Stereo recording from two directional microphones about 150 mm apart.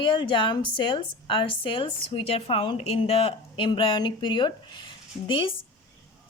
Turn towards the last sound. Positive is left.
turn(degrees=35)  # may be behind; listen again after turning